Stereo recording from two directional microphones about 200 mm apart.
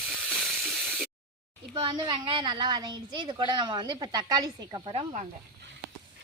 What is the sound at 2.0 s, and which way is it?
A woman's voice, 25° right (ahead or behind).